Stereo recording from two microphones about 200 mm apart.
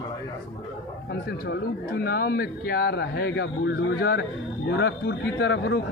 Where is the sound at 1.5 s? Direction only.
50° left (ahead or behind).